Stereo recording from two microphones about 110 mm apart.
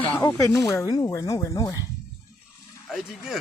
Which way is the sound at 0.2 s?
30° left (ahead or behind).